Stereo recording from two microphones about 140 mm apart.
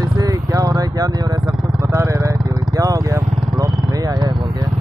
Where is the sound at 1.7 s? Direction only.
20° right (ahead or behind).